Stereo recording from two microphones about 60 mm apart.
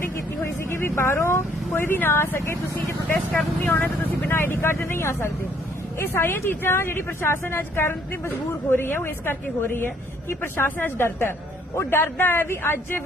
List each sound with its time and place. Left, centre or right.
0.4 s speech: left
3.6 s speech: left